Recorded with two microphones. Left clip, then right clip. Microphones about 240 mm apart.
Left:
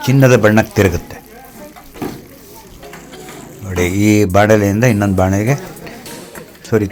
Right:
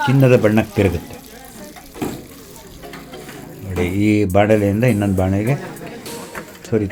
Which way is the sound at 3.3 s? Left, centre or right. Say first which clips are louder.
Left 4 dB; centre.